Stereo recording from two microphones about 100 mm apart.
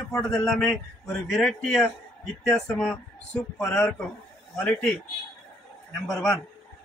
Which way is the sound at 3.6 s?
30° left (ahead or behind).